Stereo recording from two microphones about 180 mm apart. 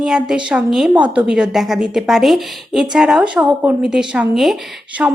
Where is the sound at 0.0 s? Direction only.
5° right (ahead or behind).